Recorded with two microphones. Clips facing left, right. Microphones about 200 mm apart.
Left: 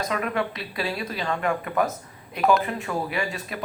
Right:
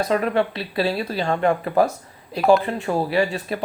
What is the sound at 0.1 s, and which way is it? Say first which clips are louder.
Speech: right 6 dB; 35° right (ahead or behind).